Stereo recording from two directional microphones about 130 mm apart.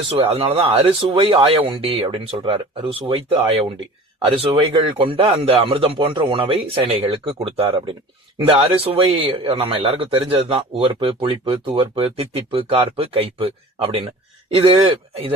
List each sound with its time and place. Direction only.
0.2 s a man's voice: 50° right (ahead or behind)